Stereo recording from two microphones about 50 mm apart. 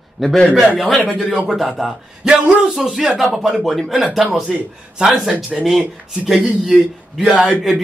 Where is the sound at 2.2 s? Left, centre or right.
Centre.